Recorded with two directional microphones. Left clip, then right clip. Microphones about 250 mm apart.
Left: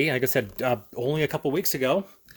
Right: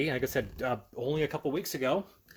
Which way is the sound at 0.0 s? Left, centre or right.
Left.